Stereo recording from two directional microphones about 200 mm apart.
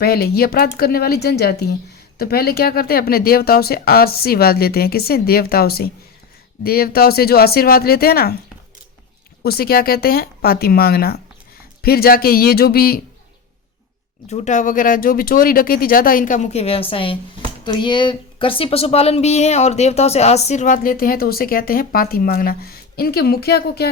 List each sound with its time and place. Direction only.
0.0 s speech: 50° left (ahead or behind)
9.4 s speech: 50° left (ahead or behind)
14.3 s speech: 35° left (ahead or behind); by 23.9 s 50° left (ahead or behind)